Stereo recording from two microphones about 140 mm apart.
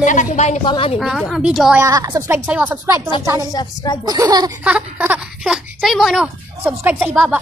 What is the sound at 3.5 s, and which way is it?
Speech, 30° left (ahead or behind).